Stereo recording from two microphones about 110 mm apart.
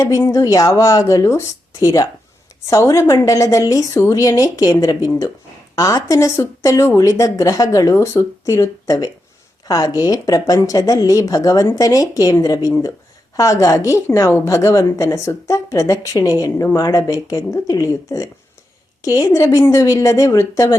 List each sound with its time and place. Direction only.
0.1 s a woman's voice: 30° left (ahead or behind)